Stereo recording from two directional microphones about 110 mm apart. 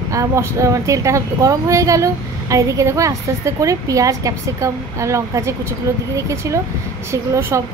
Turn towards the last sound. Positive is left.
turn(degrees=-25)  # may be behind; listen again after turning